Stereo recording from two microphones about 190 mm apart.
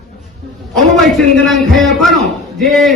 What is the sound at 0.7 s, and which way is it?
A man's voice, centre (ahead or behind).